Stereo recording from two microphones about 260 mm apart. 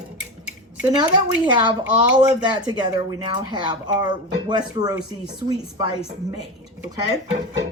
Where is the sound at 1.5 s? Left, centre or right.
Centre.